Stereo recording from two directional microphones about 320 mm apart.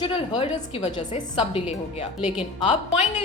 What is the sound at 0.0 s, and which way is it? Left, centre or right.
A woman's voice, centre.